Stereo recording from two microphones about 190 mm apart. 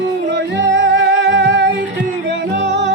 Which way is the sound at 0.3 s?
70° right (ahead or behind).